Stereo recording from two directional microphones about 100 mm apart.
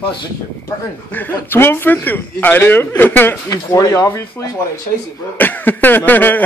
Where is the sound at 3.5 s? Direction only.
35° left (ahead or behind).